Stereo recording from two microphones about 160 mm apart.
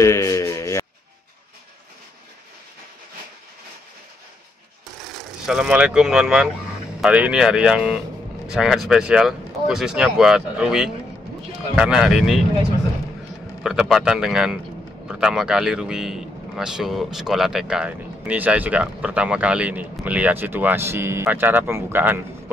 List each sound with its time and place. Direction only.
0.0 s a sound: 20° left (ahead or behind)
5.1 s speech: 5° right (ahead or behind)
13.6 s a man's voice: centre (ahead or behind)